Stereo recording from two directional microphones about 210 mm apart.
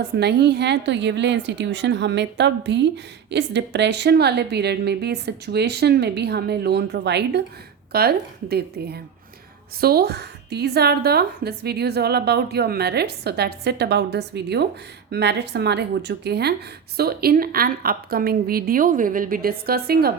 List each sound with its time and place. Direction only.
0.2 s a woman's voice: 55° right (ahead or behind)